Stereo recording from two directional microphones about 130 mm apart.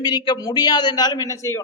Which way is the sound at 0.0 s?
35° left (ahead or behind).